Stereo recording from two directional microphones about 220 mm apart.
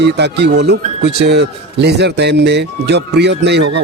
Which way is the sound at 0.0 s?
50° right (ahead or behind).